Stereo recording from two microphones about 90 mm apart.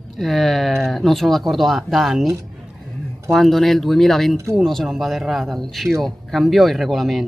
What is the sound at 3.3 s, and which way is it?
Speech, centre (ahead or behind).